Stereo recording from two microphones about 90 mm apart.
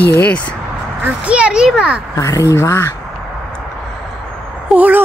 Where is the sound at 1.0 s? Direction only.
15° right (ahead or behind).